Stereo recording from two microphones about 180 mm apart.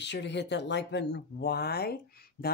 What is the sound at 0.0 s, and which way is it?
Speech, 75° left (ahead or behind).